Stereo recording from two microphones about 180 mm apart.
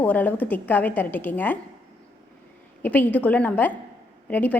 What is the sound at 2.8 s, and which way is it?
A woman's voice, 10° left (ahead or behind).